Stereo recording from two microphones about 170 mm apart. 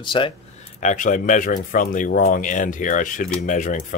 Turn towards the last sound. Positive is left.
turn(degrees=50)  # may be behind; listen again after turning